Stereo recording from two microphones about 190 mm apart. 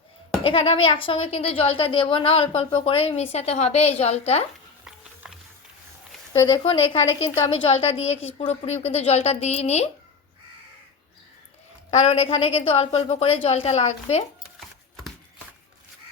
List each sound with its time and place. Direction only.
0.4 s a woman's voice: 30° left (ahead or behind)
5.2 s wild animals: 5° right (ahead or behind)
6.6 s a woman's voice: 30° left (ahead or behind)
11.9 s a woman's voice: 30° left (ahead or behind)